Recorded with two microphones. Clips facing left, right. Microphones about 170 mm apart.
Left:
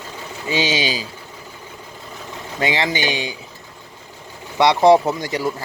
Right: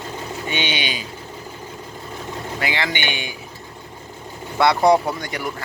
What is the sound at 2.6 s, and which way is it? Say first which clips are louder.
Speech: left 5 dB; 25° left (ahead or behind).